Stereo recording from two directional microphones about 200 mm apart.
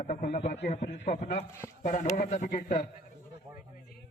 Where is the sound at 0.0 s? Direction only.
35° left (ahead or behind).